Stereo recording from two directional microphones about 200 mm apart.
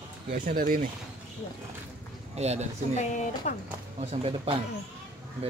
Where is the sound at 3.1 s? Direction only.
40° left (ahead or behind).